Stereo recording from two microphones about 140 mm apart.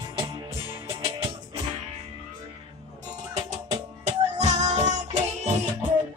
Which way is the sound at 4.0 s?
55° right (ahead or behind).